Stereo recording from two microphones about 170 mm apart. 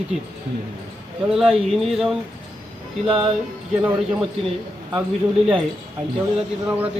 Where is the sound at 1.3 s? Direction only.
Centre (ahead or behind).